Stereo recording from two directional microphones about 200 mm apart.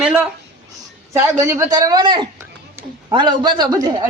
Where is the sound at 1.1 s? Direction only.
10° right (ahead or behind).